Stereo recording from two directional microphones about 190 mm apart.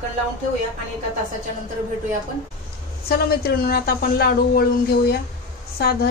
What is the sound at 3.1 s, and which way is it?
Speech, 55° left (ahead or behind).